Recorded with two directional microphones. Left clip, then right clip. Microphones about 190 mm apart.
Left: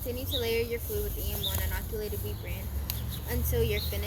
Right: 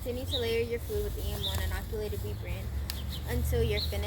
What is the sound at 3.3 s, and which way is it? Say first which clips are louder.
Speech: left 1 dB; 15° left (ahead or behind).